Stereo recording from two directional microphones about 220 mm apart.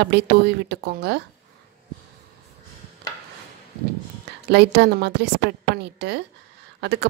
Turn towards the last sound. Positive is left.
turn(degrees=-50)  # may be behind; listen again after turning